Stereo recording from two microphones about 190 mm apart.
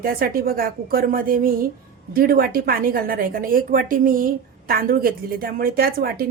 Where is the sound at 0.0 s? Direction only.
50° right (ahead or behind).